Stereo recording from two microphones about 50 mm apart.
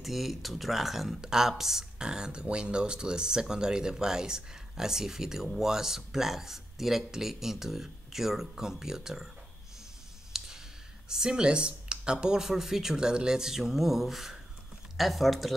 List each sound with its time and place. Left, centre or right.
0.0 s speech: centre
10.3 s clicking: centre
11.1 s speech: centre